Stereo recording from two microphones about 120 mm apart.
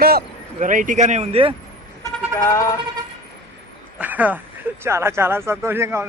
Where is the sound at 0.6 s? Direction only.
90° right.